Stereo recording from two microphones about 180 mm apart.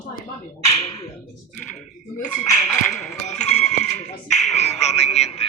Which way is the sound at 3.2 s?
40° left (ahead or behind).